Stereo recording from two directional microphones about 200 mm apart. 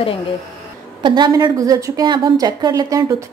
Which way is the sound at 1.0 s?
20° right (ahead or behind).